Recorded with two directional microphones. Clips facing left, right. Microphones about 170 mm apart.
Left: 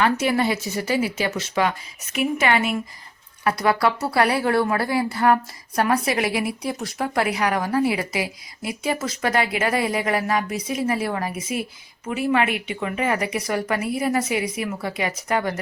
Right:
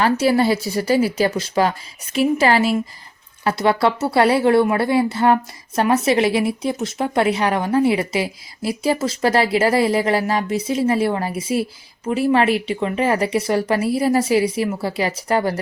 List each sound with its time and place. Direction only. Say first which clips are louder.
0.0 s a woman's voice: right 4 dB; 35° right (ahead or behind)